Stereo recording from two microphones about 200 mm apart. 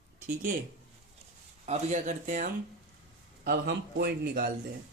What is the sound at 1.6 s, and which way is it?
Speech, 35° right (ahead or behind).